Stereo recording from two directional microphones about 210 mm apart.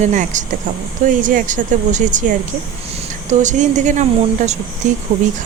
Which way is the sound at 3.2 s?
35° right (ahead or behind).